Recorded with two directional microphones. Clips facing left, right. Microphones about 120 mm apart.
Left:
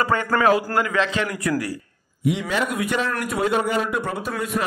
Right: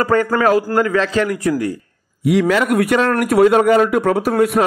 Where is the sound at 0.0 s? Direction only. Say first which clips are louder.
Right 5 dB; 40° right (ahead or behind).